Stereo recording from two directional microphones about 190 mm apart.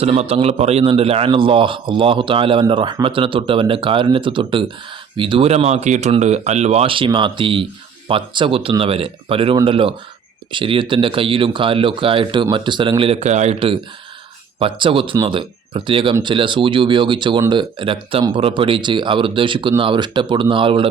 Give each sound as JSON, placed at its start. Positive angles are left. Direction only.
{"t": 0.0, "sound": "speech", "side_deg": -30}